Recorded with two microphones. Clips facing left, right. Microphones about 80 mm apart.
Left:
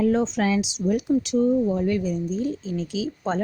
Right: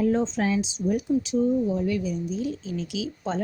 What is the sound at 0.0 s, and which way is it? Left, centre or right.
Speech, left.